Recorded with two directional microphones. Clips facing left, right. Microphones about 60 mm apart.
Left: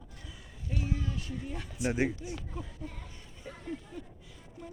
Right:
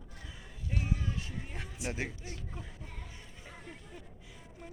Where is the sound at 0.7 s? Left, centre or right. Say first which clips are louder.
Left 1 dB; right.